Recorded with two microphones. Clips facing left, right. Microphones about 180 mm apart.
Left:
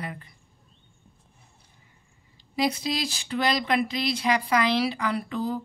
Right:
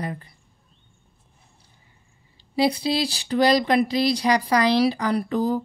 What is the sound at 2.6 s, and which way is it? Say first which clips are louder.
Speech: right 5 dB; 30° right (ahead or behind).